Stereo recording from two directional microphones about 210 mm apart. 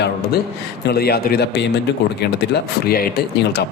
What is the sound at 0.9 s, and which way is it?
A man's voice, 50° left (ahead or behind).